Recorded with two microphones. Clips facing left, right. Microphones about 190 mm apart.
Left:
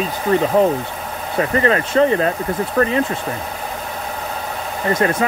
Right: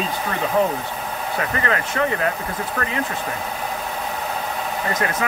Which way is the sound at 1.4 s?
30° left (ahead or behind).